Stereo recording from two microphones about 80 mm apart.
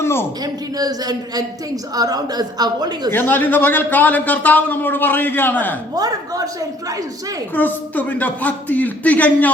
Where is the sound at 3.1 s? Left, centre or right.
Left.